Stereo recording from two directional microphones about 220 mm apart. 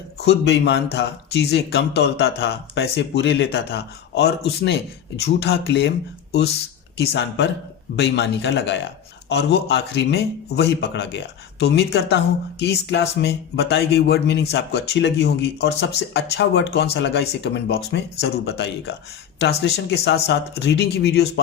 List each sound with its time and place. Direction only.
0.2 s a man's voice: 50° left (ahead or behind)
6.9 s a man's voice: 50° left (ahead or behind)